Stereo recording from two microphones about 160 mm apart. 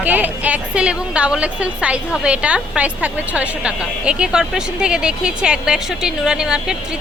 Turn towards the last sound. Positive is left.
turn(degrees=-5)  # may be behind; listen again after turning